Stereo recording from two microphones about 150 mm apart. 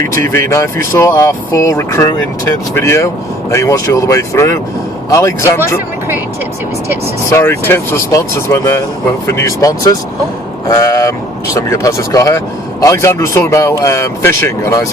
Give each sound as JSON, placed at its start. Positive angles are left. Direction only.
{"t": 0.3, "sound": "speech", "side_deg": 20}
{"t": 7.3, "sound": "speech", "side_deg": 15}